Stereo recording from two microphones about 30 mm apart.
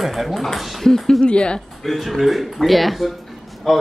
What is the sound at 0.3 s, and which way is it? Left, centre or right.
Speech, centre.